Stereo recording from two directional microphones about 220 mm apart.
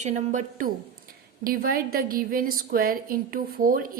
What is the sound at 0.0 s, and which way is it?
A woman's voice, 35° right (ahead or behind).